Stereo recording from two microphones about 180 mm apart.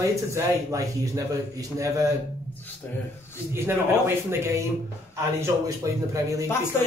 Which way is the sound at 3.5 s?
15° right (ahead or behind).